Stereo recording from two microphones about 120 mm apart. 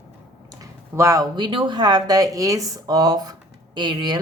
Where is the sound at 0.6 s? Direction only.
25° right (ahead or behind).